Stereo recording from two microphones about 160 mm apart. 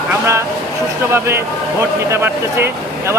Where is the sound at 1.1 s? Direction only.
15° right (ahead or behind).